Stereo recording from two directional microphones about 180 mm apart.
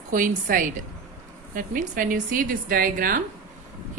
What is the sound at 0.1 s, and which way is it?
Speech, 45° right (ahead or behind).